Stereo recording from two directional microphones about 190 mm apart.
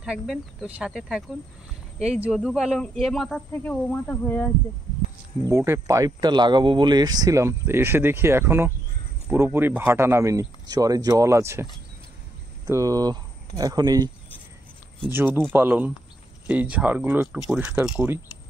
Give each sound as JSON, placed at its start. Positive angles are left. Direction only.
{"t": 0.0, "sound": "speech", "side_deg": -5}
{"t": 5.4, "sound": "speech", "side_deg": -15}
{"t": 12.6, "sound": "speech", "side_deg": -15}